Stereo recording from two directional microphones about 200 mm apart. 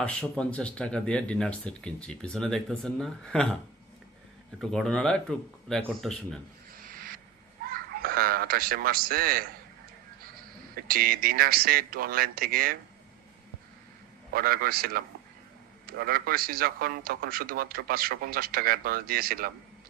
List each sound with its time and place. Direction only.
0.0 s speech: 5° left (ahead or behind)
4.6 s speech: centre (ahead or behind)
6.8 s a sound: 45° right (ahead or behind)
10.9 s a man's voice: 45° right (ahead or behind)
14.3 s a man's voice: 45° right (ahead or behind)